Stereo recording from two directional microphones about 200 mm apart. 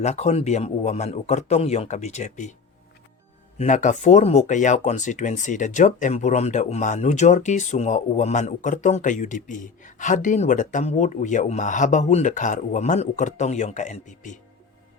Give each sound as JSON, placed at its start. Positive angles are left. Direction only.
{"t": 0.0, "sound": "speech", "side_deg": 35}
{"t": 3.6, "sound": "speech", "side_deg": 40}